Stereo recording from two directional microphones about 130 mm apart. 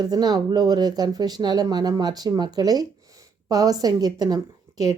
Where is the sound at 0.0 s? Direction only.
30° right (ahead or behind).